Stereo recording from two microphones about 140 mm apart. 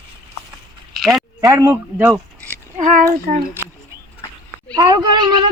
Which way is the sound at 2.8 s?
70° right (ahead or behind).